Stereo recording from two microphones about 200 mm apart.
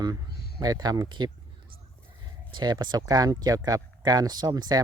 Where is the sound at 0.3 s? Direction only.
50° left (ahead or behind).